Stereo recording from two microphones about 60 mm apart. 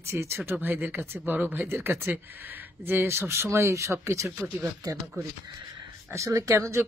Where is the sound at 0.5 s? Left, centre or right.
Right.